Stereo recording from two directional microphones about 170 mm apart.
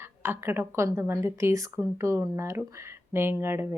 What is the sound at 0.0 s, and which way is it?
A woman's voice, 15° right (ahead or behind).